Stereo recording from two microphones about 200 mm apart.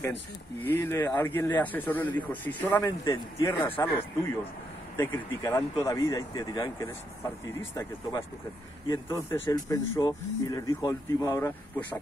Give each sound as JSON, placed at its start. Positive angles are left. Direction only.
{"t": 0.7, "sound": "speech", "side_deg": 10}
{"t": 3.1, "sound": "speech", "side_deg": 25}
{"t": 3.6, "sound": "speech", "side_deg": 10}